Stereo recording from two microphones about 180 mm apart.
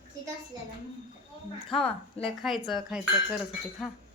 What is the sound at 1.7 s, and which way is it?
Speech, 30° left (ahead or behind).